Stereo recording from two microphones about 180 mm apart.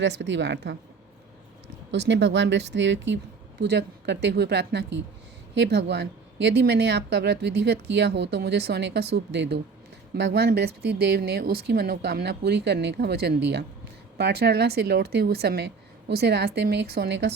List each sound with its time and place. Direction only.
0.0 s speech: 80° right
1.9 s speech: 75° right (ahead or behind)
3.6 s speech: 70° right (ahead or behind)